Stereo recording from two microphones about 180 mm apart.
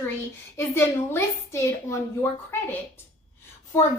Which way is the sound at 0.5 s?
15° left (ahead or behind).